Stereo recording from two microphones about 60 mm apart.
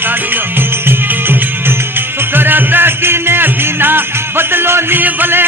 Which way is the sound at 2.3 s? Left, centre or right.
Right.